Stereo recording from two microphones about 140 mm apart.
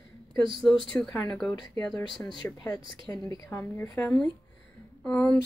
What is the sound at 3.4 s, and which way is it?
A woman's voice, 20° left (ahead or behind).